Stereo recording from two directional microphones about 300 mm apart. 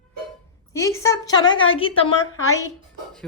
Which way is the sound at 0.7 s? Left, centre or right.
Centre.